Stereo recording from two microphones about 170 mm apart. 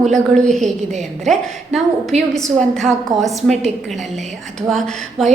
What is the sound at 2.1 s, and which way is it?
Speech, 40° right (ahead or behind).